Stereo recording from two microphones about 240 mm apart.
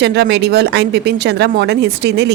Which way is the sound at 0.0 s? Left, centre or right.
Right.